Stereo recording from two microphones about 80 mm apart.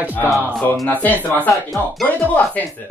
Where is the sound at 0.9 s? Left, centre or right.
Left.